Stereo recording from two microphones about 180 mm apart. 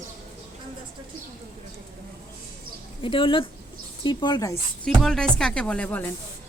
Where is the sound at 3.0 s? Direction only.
30° left (ahead or behind).